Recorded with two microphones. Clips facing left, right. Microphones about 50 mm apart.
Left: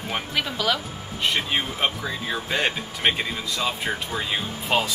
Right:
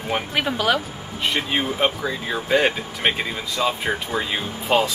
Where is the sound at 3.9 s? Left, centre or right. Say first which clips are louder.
Right 4 dB; centre.